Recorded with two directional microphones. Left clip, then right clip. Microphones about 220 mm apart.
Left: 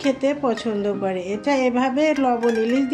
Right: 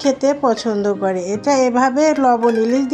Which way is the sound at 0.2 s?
25° right (ahead or behind).